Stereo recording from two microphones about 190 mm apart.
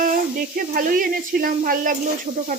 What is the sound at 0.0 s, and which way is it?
Speech, 50° right (ahead or behind).